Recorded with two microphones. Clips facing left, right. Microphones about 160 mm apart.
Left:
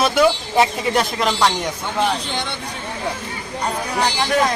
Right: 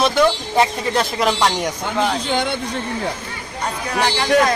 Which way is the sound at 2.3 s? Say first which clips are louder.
Right 6 dB; 50° right (ahead or behind).